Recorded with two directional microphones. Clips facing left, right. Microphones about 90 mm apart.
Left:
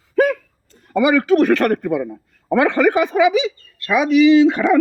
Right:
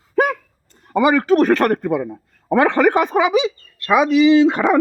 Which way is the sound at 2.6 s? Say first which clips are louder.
Right 1 dB; 40° right (ahead or behind).